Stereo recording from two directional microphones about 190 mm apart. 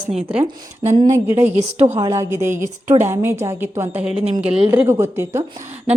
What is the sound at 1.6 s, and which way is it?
Speech, 35° right (ahead or behind).